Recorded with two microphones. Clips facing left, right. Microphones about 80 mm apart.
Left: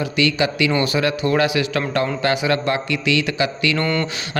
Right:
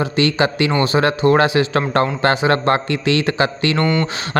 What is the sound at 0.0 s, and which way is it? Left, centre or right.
Speech, right.